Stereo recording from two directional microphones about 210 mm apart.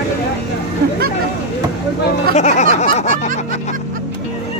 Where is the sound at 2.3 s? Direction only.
35° left (ahead or behind).